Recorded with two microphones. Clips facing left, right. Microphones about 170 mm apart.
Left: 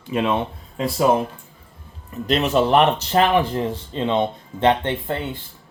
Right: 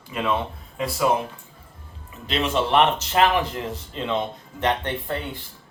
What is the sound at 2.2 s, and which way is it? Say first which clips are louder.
Speech: left 5 dB; 40° left (ahead or behind).